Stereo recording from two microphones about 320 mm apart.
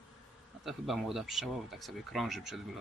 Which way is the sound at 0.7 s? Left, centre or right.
Centre.